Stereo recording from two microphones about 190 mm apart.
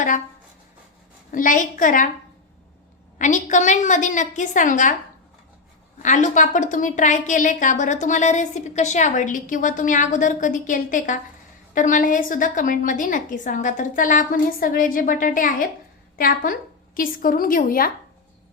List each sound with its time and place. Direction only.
1.3 s a woman's voice: 45° left (ahead or behind)
3.2 s a woman's voice: 40° left (ahead or behind)
6.0 s a woman's voice: 40° left (ahead or behind)